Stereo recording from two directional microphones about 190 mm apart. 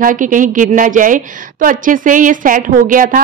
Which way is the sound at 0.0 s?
45° right (ahead or behind).